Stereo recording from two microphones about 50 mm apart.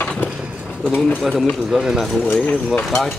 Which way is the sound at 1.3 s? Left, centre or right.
Centre.